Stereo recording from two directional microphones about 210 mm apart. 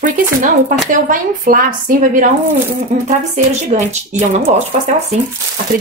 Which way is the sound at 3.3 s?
35° right (ahead or behind).